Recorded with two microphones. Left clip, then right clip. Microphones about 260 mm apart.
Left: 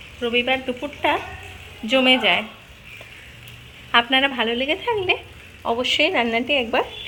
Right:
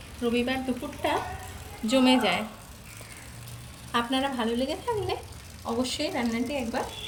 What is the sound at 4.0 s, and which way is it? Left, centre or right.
Speech, centre.